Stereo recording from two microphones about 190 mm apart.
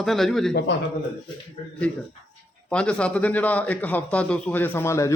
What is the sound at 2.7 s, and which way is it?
A man's voice, 5° left (ahead or behind).